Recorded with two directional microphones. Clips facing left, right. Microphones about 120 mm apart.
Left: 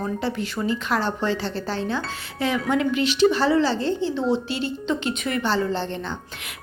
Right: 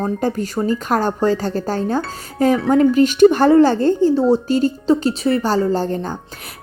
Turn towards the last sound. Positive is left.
turn(degrees=-40)  # may be behind; listen again after turning